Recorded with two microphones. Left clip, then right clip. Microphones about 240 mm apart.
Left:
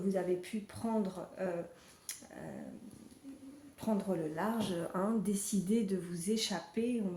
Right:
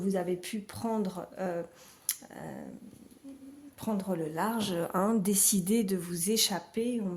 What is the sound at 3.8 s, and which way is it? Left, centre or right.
Speech, right.